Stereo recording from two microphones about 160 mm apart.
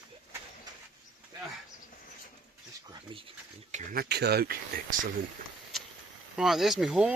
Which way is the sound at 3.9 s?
80° right.